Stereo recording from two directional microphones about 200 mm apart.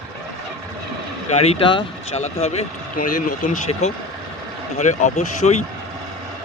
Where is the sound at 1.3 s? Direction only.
30° left (ahead or behind).